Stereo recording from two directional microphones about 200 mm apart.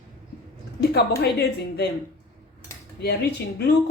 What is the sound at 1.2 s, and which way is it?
Speech, 55° left (ahead or behind).